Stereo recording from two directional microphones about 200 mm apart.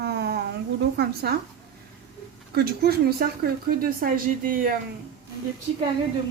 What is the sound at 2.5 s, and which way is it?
Speech, 50° right (ahead or behind).